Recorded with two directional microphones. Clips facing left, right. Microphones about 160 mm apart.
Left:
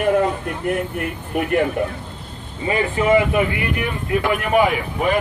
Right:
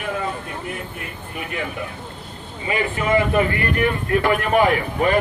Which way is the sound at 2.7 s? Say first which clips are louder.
Left 4 dB; 20° left (ahead or behind).